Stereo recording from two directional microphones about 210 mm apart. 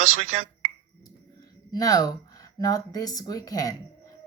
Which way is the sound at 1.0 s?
20° left (ahead or behind).